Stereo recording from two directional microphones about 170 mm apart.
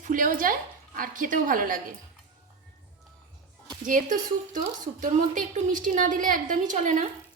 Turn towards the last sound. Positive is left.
turn(degrees=-45)  # may be behind; listen again after turning